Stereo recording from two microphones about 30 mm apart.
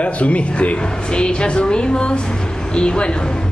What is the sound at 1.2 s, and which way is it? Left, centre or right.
A woman's voice, left.